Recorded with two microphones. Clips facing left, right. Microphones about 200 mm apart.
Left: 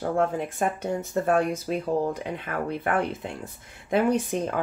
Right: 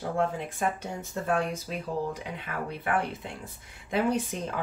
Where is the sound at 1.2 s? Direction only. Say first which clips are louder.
Left 4 dB; 55° left (ahead or behind).